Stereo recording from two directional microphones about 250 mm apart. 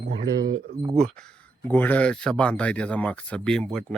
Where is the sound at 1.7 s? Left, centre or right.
Centre.